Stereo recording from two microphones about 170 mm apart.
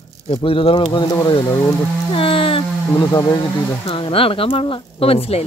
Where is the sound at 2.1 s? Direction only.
30° left (ahead or behind).